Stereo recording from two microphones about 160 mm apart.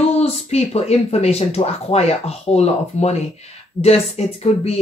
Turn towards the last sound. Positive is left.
turn(degrees=40)  # may be behind; listen again after turning